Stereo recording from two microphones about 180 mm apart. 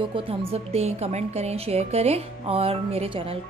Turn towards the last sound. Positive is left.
turn(degrees=-30)  # may be behind; listen again after turning